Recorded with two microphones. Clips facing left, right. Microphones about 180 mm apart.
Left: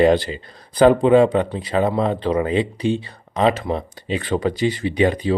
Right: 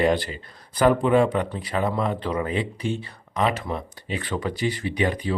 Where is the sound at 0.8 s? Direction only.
25° left (ahead or behind).